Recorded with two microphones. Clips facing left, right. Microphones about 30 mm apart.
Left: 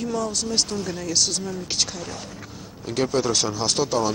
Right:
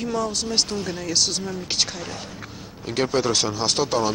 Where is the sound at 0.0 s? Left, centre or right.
Centre.